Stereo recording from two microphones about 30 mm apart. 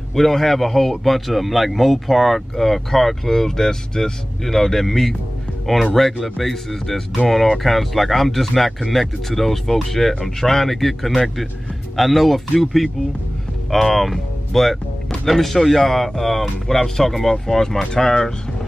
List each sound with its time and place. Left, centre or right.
0.1 s a man's voice: centre